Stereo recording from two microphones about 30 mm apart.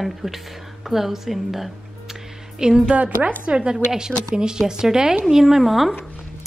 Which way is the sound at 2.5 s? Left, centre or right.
Right.